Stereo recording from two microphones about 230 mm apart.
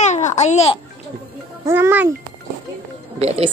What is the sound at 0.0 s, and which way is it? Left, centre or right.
Babbling, left.